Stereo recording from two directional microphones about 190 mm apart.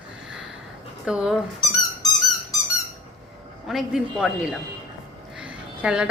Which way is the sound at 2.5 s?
20° left (ahead or behind).